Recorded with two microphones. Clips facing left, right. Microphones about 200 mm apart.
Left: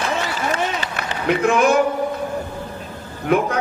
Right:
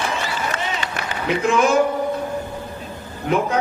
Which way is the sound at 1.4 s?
60° left (ahead or behind).